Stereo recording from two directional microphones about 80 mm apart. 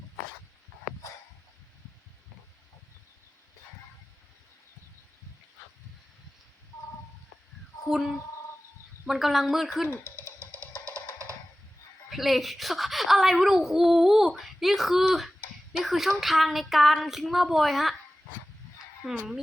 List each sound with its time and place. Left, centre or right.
7.9 s a child's voice: centre
10.2 s music: right
12.1 s a child's voice: centre
19.0 s a child's voice: centre